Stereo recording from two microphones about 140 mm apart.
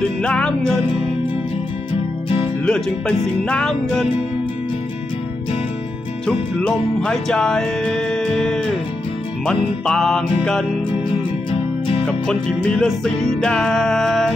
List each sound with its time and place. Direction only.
0.2 s music: 5° left (ahead or behind)
2.2 s music: 40° left (ahead or behind)
2.6 s music: 5° left (ahead or behind)
6.2 s music: 5° left (ahead or behind)
12.1 s music: 5° left (ahead or behind)